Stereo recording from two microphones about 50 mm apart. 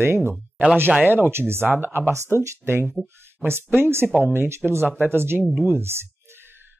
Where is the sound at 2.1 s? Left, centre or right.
Right.